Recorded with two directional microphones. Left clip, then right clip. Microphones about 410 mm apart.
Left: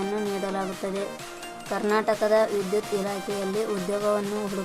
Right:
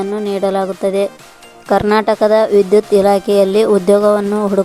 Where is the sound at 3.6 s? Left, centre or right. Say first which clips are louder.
Right 17 dB; centre.